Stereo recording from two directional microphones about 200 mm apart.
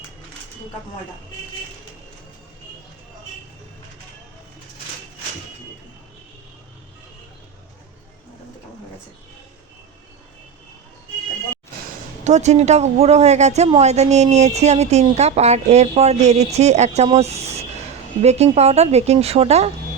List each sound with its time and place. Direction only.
12.2 s a woman's voice: 35° right (ahead or behind)